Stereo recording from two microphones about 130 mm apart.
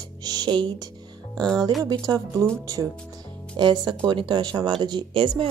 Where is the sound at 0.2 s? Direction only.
30° right (ahead or behind).